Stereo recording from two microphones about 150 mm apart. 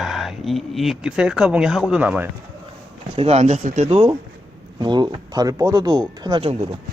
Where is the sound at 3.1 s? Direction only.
45° right (ahead or behind).